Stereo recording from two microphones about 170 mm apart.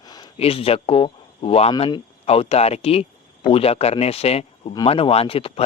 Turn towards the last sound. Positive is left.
turn(degrees=35)  # may be behind; listen again after turning